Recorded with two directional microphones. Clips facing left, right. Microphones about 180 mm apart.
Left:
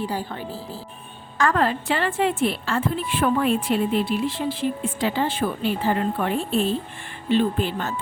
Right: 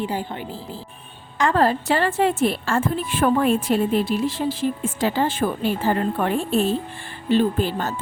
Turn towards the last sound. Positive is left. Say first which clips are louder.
# right 2 dB
turn(degrees=-40)  # may be behind; listen again after turning